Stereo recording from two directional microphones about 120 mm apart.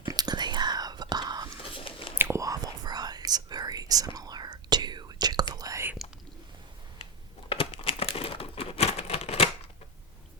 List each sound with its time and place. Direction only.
0.1 s whispering: 35° right (ahead or behind)
1.7 s biting: 50° left (ahead or behind)
2.1 s whispering: 20° right (ahead or behind)
7.5 s crumpling: 50° left (ahead or behind)